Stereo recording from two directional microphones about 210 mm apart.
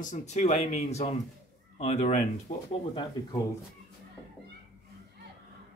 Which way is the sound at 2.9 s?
20° left (ahead or behind).